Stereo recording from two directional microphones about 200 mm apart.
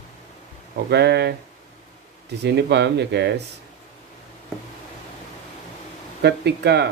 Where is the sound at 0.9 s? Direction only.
55° right (ahead or behind).